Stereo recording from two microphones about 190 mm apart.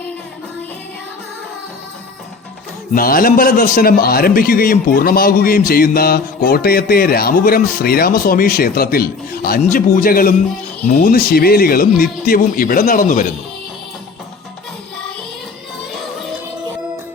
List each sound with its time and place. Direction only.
2.9 s a man's voice: 50° left (ahead or behind)